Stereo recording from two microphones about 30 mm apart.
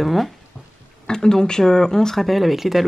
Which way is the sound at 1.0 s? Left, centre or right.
Left.